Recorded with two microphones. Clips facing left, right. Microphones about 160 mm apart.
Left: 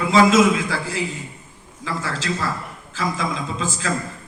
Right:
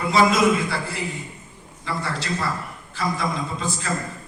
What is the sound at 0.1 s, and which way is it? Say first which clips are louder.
A man's voice: left 3 dB; 90° left.